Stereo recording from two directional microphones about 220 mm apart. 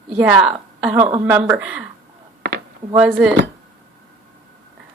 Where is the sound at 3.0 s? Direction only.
5° right (ahead or behind).